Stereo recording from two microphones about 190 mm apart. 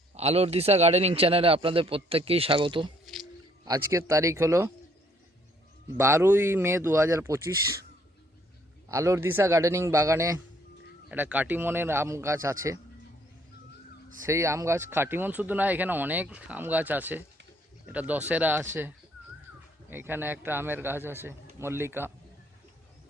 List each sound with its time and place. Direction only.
0.1 s a man's voice: 35° right (ahead or behind)
3.7 s speech: 15° right (ahead or behind)
6.0 s speech: 15° right (ahead or behind)
8.9 s speech: 15° right (ahead or behind)
14.3 s speech: 15° right (ahead or behind)